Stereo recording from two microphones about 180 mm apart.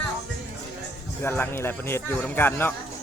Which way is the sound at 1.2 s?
15° left (ahead or behind).